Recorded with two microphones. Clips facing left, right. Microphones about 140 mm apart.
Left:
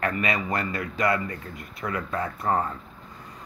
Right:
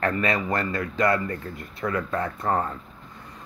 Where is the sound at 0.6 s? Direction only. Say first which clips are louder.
Right 2 dB; 20° left (ahead or behind).